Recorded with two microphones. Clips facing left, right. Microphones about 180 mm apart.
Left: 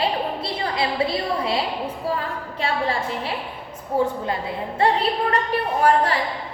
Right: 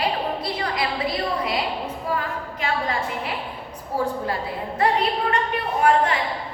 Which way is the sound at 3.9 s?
20° left (ahead or behind).